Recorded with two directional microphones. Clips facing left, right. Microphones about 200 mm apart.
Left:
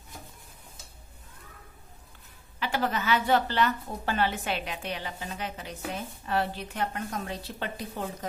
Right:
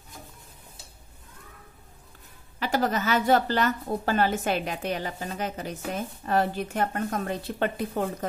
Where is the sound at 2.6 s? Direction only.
40° right (ahead or behind).